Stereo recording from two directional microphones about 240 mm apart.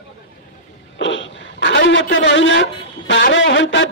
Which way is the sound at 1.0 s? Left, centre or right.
Left.